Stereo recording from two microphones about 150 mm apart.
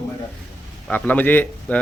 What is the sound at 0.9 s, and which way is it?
Speech, 10° left (ahead or behind).